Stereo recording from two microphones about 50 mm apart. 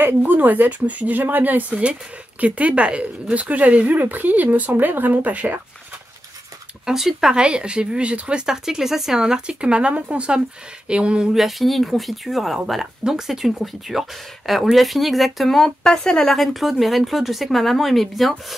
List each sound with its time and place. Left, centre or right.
0.0 s a woman's voice: right
1.7 s a woman's voice: right
6.9 s speech: centre
7.4 s speech: centre
9.7 s speech: right
11.3 s speech: centre
16.3 s speech: centre